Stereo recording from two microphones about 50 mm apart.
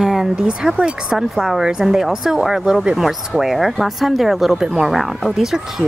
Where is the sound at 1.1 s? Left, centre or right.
Centre.